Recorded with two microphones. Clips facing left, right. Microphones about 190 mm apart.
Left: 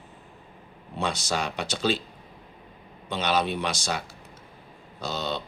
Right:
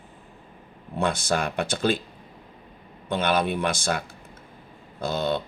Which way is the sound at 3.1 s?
55° right (ahead or behind).